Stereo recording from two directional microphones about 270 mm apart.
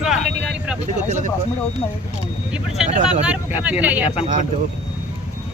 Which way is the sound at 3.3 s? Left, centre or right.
Centre.